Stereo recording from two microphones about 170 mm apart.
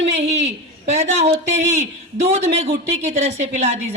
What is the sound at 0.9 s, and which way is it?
A man's voice, 40° right (ahead or behind).